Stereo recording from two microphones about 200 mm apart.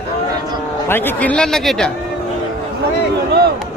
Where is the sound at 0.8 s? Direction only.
10° left (ahead or behind).